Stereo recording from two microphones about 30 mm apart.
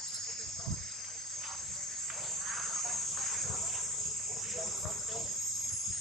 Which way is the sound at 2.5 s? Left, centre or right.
Centre.